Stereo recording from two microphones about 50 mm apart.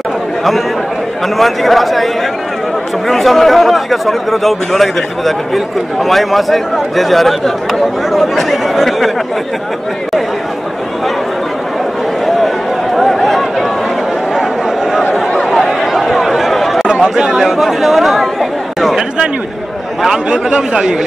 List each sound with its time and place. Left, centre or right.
1.4 s speech: centre
3.1 s speech: centre
12.9 s a sound: centre
14.3 s chatter: centre
15.1 s chatter: centre
16.8 s speech: centre
20.2 s a man's voice: centre